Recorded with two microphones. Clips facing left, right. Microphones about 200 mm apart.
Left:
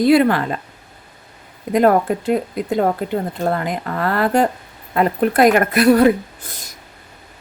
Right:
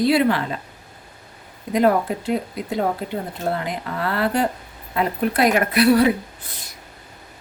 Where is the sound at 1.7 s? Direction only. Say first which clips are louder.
Left 4 dB; 50° left (ahead or behind).